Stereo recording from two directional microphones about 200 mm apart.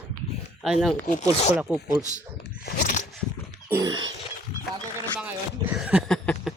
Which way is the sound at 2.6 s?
45° left (ahead or behind).